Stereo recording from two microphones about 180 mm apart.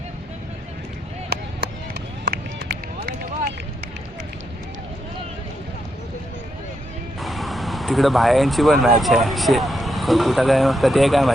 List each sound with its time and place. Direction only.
1.3 s run: 65° right (ahead or behind)
7.2 s speech: centre (ahead or behind)